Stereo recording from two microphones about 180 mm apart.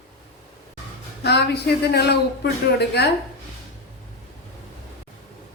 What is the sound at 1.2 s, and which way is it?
Speech, 65° left (ahead or behind).